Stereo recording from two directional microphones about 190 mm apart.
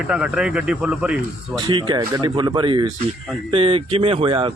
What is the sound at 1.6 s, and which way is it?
Speech, 25° right (ahead or behind).